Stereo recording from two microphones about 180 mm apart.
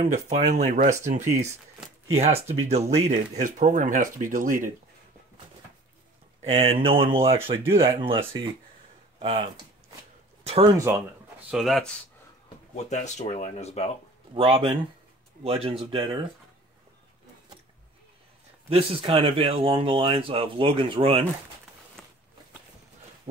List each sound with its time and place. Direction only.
0.1 s speech: 35° right (ahead or behind)
6.4 s speech: 35° right (ahead or behind)
8.3 s speech: 90° right
9.2 s speech: 30° right (ahead or behind)
11.5 s speech: centre (ahead or behind)
12.7 s speech: 40° left (ahead or behind)
14.3 s speech: 30° right (ahead or behind)
18.7 s speech: 30° right (ahead or behind)
22.0 s a sound: 5° left (ahead or behind)